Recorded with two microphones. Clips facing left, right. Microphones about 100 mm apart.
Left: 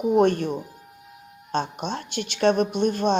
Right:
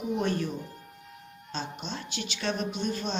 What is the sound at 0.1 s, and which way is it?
Speech, 55° left (ahead or behind).